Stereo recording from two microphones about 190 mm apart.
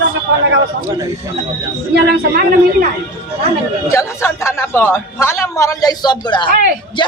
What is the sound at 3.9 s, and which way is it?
A man's voice, 15° left (ahead or behind).